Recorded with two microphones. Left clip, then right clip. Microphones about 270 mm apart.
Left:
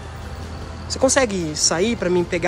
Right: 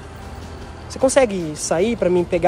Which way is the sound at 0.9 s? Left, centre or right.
Centre.